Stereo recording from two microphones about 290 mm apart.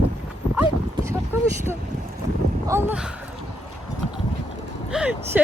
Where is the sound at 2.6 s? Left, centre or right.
Centre.